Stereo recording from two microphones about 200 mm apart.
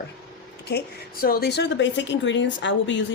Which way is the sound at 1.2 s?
50° left (ahead or behind).